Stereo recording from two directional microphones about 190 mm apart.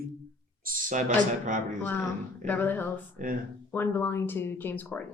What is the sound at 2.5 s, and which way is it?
Speech, 10° left (ahead or behind).